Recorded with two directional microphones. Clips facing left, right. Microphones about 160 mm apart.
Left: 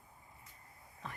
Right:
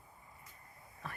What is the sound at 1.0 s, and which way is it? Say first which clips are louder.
Speech: even; 20° left (ahead or behind).